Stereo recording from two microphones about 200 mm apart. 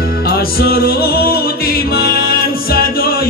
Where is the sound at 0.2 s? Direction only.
50° left (ahead or behind).